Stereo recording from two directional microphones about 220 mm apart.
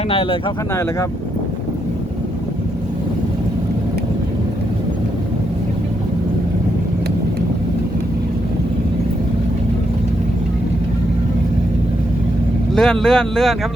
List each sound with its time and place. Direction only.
0.1 s speech: 25° left (ahead or behind)
12.7 s speech: 5° left (ahead or behind)